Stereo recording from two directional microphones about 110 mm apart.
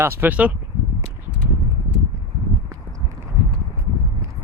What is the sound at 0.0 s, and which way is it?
Speech, 15° right (ahead or behind).